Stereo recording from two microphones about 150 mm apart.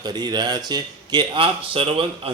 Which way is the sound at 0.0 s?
30° right (ahead or behind).